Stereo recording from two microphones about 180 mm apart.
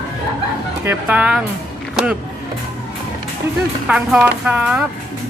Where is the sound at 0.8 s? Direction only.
10° right (ahead or behind).